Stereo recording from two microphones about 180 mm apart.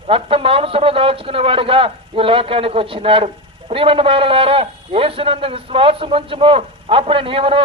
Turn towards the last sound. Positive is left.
turn(degrees=-30)  # may be behind; listen again after turning